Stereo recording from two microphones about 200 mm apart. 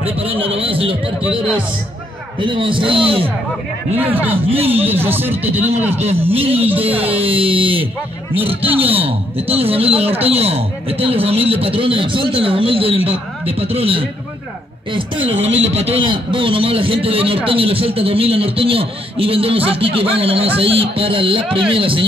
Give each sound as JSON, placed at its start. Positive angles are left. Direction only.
{"t": 0.0, "sound": "speech", "side_deg": -30}
{"t": 2.4, "sound": "speech", "side_deg": -25}
{"t": 3.9, "sound": "speech", "side_deg": -10}
{"t": 4.5, "sound": "speech", "side_deg": -30}
{"t": 4.8, "sound": "speech", "side_deg": -10}
{"t": 6.3, "sound": "speech", "side_deg": -30}
{"t": 15.1, "sound": "speech", "side_deg": -70}
{"t": 15.7, "sound": "speech", "side_deg": -30}